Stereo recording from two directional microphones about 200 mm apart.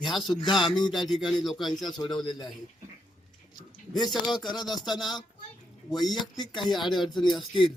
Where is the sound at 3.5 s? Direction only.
20° left (ahead or behind).